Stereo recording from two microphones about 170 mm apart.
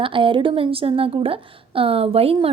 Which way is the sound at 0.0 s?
30° right (ahead or behind).